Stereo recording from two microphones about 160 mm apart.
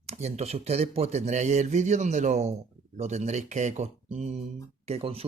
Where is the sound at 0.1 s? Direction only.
40° right (ahead or behind).